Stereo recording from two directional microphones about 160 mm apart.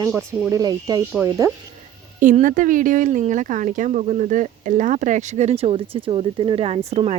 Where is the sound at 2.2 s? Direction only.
55° right (ahead or behind).